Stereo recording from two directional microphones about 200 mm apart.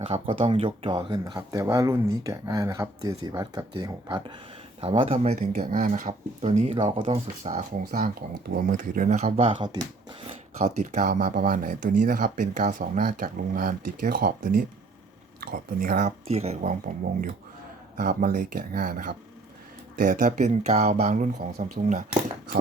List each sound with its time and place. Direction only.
0.0 s speech: 30° right (ahead or behind)
7.9 s speech: 45° right (ahead or behind); by 10.2 s 25° right (ahead or behind)
10.6 s speech: 35° right (ahead or behind)